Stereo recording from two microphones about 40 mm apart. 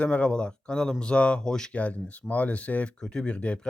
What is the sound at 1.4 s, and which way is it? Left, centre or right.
Speech, centre.